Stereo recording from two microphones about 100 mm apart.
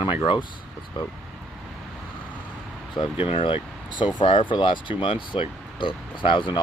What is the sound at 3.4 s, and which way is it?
Speech, 55° left (ahead or behind).